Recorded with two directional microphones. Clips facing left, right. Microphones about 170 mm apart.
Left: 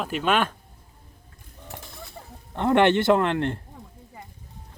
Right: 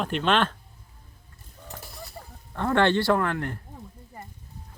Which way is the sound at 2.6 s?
20° left (ahead or behind).